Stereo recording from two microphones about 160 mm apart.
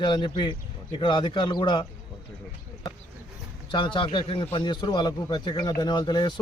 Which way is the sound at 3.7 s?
30° left (ahead or behind).